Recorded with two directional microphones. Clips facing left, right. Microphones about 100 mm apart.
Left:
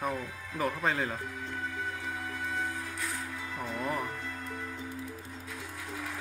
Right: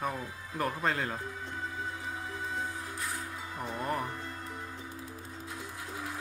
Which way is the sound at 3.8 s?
Centre (ahead or behind).